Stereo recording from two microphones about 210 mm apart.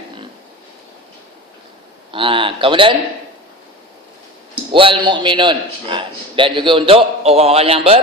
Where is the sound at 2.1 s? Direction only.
25° right (ahead or behind).